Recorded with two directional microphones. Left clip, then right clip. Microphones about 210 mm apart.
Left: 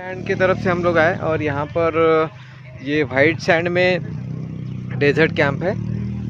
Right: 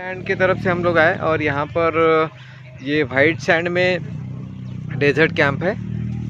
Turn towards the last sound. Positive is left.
turn(degrees=-5)  # may be behind; listen again after turning